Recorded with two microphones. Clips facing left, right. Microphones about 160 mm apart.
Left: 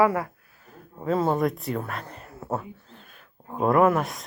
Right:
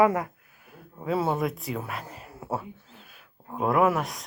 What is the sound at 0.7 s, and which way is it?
Speech, 10° right (ahead or behind).